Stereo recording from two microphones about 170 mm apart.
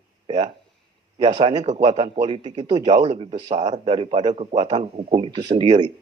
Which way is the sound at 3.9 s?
30° right (ahead or behind).